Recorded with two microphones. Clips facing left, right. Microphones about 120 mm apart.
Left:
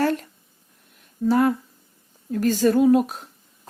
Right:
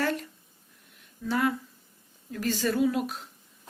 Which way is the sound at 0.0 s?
40° left (ahead or behind).